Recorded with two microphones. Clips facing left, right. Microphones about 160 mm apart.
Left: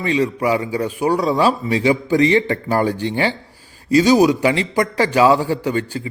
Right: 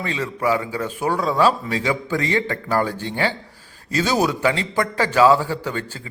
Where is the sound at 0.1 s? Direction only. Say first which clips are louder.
Left 5 dB; 15° left (ahead or behind).